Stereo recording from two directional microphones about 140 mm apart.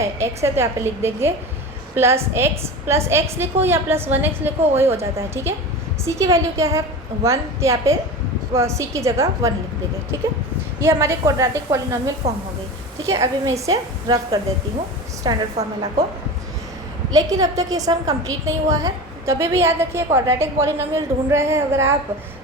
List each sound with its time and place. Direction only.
0.0 s a woman's voice: 20° right (ahead or behind)
10.8 s a woman's voice: 20° right (ahead or behind)
17.1 s a woman's voice: 25° right (ahead or behind)